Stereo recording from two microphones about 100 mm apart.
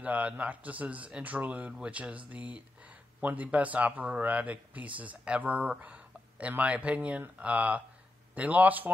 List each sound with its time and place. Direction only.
0.0 s a man's voice: 15° right (ahead or behind)